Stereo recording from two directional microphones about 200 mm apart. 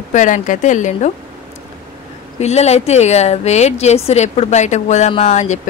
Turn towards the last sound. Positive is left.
turn(degrees=35)  # may be behind; listen again after turning